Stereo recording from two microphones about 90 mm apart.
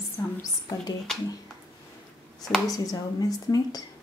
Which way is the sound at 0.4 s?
45° left (ahead or behind).